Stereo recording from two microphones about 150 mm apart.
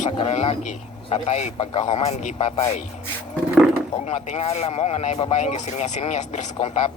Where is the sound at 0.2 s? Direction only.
45° left (ahead or behind).